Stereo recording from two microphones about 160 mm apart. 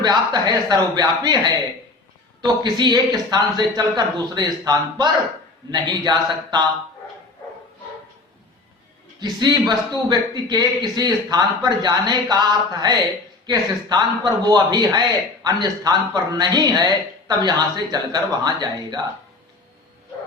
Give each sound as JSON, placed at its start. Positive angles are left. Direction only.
{"t": 0.0, "sound": "a man's voice", "side_deg": -25}
{"t": 9.2, "sound": "a man's voice", "side_deg": -25}